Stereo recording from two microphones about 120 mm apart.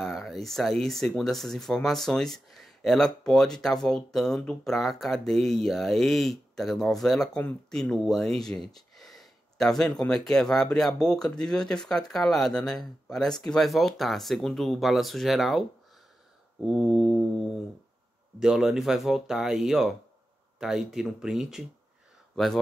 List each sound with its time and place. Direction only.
0.0 s speech: centre (ahead or behind)
16.6 s speech: centre (ahead or behind)
18.4 s speech: 5° right (ahead or behind)